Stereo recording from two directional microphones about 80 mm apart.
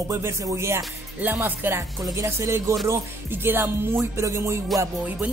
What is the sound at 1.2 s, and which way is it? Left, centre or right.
Music, right.